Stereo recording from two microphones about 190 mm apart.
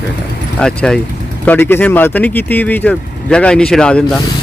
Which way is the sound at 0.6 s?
5° left (ahead or behind).